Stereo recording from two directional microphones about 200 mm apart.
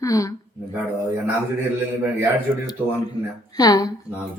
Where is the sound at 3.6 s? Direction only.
20° left (ahead or behind).